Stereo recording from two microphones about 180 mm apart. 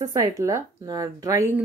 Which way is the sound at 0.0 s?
20° right (ahead or behind).